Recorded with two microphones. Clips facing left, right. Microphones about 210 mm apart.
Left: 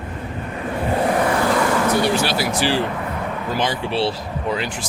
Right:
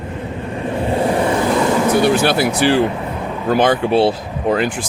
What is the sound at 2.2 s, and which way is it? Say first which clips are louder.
Speech: right 6 dB; 55° right (ahead or behind).